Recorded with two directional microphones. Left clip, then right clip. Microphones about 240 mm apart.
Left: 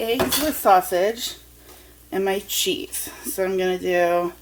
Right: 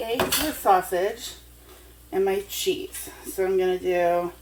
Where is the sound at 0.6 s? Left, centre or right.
Left.